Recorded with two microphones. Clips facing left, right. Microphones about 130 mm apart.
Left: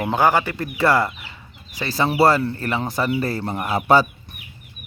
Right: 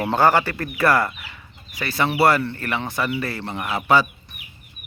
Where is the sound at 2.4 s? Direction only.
35° left (ahead or behind).